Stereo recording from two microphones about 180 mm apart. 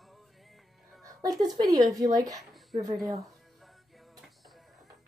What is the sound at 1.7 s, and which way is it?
Speech, 20° right (ahead or behind).